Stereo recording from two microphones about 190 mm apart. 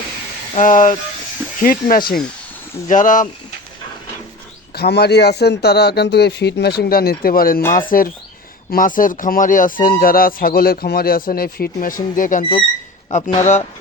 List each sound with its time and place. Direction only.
0.5 s a man's voice: 45° left (ahead or behind)
4.7 s a man's voice: 55° left (ahead or behind)
12.4 s speech: 25° left (ahead or behind)
13.1 s speech: 40° left (ahead or behind)